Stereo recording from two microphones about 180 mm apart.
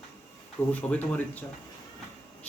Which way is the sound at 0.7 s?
10° left (ahead or behind).